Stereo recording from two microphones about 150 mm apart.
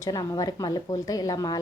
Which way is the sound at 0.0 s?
25° left (ahead or behind).